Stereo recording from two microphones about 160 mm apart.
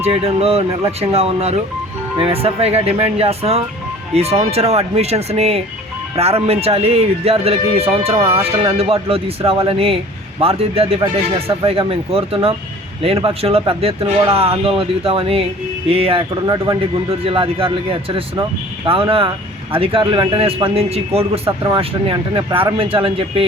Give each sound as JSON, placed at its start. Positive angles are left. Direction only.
{"t": 0.0, "sound": "speech", "side_deg": -40}
{"t": 18.9, "sound": "speech", "side_deg": -35}